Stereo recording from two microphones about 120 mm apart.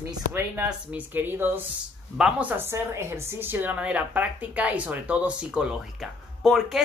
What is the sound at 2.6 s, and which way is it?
Speech, 20° right (ahead or behind).